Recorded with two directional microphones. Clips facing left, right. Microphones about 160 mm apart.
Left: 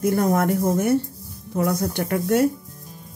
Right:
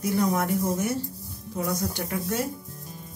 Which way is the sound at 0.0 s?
50° left (ahead or behind).